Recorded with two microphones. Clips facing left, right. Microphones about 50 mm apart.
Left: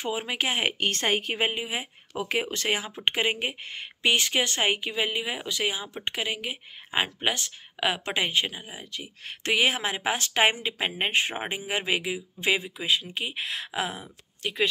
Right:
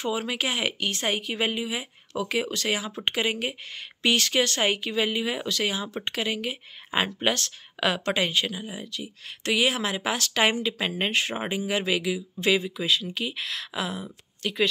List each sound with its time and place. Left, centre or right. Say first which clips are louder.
0.0 s speech: right 1 dB; left
0.8 s a woman's voice: left 2 dB; left
1.3 s speech: even; left
9.0 s speech: even; left